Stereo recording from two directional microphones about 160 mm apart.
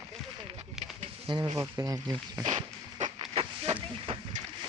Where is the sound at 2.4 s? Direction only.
50° right (ahead or behind).